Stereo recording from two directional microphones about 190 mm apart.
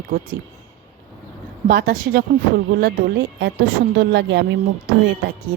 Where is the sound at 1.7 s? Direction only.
50° right (ahead or behind).